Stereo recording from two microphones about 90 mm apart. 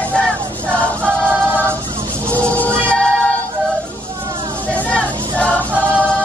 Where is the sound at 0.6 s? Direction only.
15° left (ahead or behind).